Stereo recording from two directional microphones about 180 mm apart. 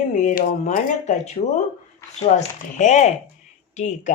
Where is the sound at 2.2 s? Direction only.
40° left (ahead or behind).